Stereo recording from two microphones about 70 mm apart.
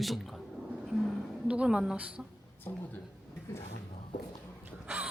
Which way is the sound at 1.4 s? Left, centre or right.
Centre.